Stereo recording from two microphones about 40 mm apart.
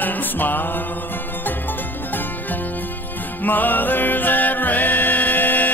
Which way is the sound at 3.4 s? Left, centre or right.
Left.